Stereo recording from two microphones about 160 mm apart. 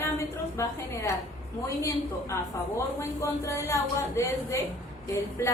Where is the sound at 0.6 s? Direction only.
20° left (ahead or behind).